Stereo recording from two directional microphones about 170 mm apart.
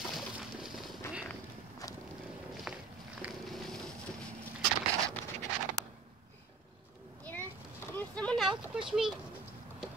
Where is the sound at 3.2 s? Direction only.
Centre (ahead or behind).